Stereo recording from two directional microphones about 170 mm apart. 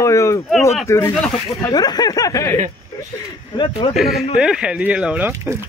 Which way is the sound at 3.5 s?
30° left (ahead or behind).